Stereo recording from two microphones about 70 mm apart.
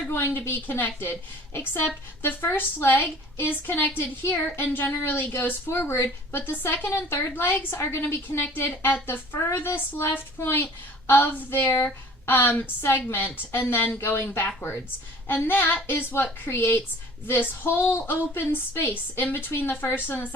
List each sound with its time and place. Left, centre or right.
0.1 s a woman's voice: left